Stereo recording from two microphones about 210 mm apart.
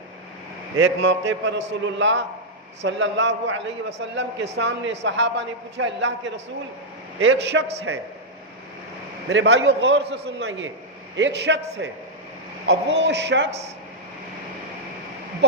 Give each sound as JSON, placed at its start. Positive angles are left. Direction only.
{"t": 0.8, "sound": "a man's voice", "side_deg": -60}
{"t": 9.3, "sound": "a man's voice", "side_deg": -55}